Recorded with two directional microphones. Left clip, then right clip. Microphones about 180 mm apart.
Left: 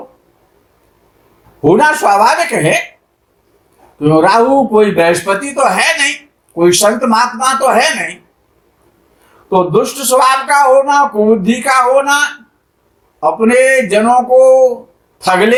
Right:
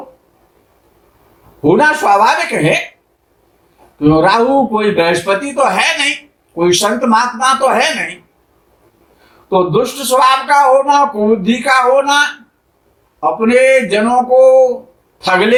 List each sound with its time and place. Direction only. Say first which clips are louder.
1.6 s speech: left 1 dB; 40° left (ahead or behind)
4.0 s speech: left 1 dB; 40° left (ahead or behind)
9.5 s speech: left 1 dB; 40° left (ahead or behind)